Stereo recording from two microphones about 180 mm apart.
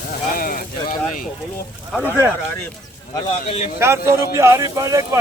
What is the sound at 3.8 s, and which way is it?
A man's voice, 15° right (ahead or behind).